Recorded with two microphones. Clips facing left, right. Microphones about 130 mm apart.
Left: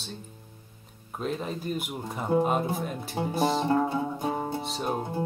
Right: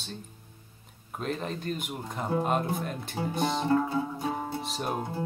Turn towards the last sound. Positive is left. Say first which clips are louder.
# left 2 dB
turn(degrees=0)  # may be behind; listen again after turning